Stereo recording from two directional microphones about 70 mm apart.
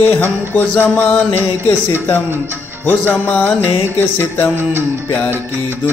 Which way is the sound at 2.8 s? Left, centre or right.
Left.